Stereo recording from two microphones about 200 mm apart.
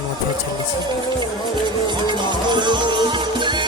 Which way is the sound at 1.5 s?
20° right (ahead or behind).